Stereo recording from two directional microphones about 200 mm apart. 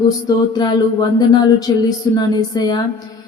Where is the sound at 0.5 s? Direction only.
20° left (ahead or behind).